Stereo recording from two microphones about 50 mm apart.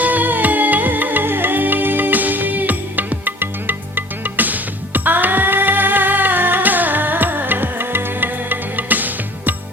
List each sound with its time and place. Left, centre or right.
0.0 s music: right